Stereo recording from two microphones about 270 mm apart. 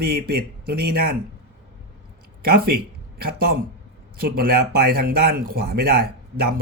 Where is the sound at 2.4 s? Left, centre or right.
Right.